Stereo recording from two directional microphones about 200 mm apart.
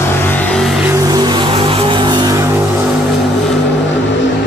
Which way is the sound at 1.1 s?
20° right (ahead or behind).